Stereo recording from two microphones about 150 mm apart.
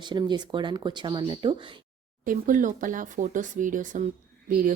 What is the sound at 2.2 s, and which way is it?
Speech, 60° right (ahead or behind).